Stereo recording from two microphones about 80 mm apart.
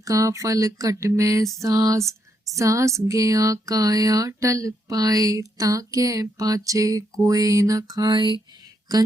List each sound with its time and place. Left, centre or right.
0.0 s speech: right